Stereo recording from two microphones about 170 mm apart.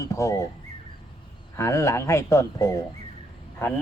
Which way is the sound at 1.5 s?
15° left (ahead or behind).